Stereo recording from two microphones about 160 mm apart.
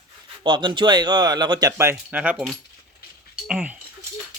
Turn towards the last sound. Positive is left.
turn(degrees=-10)  # may be behind; listen again after turning